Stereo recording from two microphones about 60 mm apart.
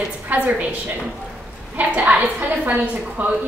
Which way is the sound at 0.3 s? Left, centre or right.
Right.